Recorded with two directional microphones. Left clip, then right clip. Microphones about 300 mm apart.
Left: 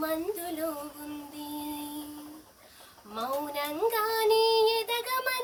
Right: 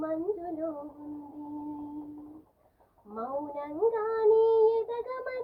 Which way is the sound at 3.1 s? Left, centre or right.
Left.